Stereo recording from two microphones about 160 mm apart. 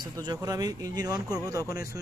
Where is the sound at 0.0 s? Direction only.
25° right (ahead or behind).